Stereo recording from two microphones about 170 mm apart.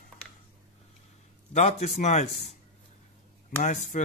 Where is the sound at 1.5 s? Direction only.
40° left (ahead or behind).